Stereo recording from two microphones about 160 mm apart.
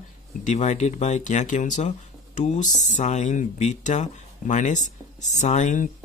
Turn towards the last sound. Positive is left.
turn(degrees=50)  # may be behind; listen again after turning